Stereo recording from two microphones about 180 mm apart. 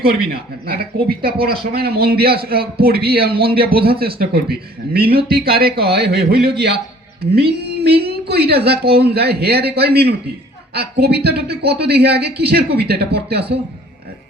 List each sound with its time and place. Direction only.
0.0 s speech: 55° right (ahead or behind)